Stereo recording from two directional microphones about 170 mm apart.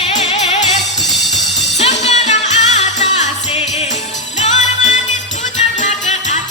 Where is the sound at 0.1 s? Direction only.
40° left (ahead or behind).